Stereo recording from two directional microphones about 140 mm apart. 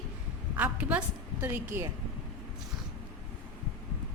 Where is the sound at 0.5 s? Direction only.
10° right (ahead or behind).